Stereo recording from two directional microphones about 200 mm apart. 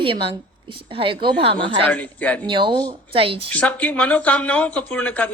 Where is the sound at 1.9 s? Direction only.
5° left (ahead or behind).